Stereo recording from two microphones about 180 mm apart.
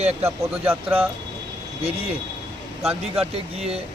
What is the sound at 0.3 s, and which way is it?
Speech, 10° right (ahead or behind).